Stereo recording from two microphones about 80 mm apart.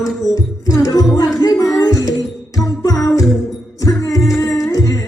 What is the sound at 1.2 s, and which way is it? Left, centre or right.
Music, left.